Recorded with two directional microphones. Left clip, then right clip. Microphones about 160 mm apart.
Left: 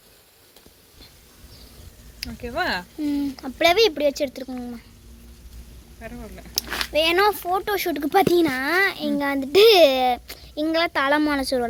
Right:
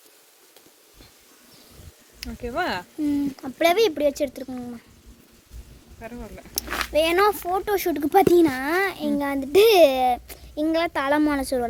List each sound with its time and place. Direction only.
2.2 s speech: 30° right (ahead or behind)
3.0 s a child's voice: centre (ahead or behind)
6.0 s speech: 45° right (ahead or behind)
6.7 s a sound: 35° right (ahead or behind)
6.9 s a child's voice: 10° right (ahead or behind)